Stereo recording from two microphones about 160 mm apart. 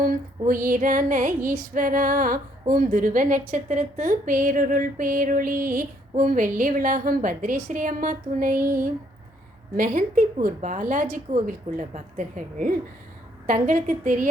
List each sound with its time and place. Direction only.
0.0 s a woman's voice: 60° right (ahead or behind)